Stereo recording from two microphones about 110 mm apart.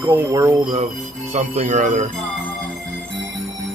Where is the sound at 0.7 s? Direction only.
90° right.